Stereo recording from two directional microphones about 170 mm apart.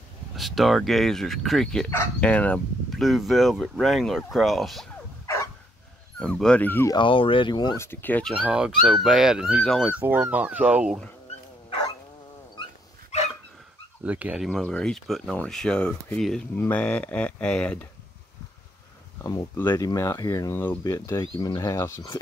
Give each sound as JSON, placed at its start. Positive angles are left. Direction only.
{"t": 0.4, "sound": "speech", "side_deg": 0}
{"t": 5.2, "sound": "dog", "side_deg": 15}
{"t": 6.1, "sound": "speech", "side_deg": 5}
{"t": 7.0, "sound": "speech", "side_deg": 30}
{"t": 7.8, "sound": "speech", "side_deg": 10}
{"t": 14.0, "sound": "speech", "side_deg": -10}
{"t": 19.2, "sound": "speech", "side_deg": 20}